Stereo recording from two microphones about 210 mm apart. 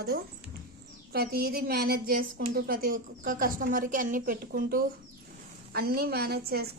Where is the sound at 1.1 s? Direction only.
45° right (ahead or behind).